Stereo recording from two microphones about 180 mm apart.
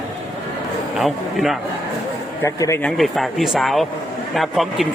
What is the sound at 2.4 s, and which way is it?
Speech, 15° left (ahead or behind).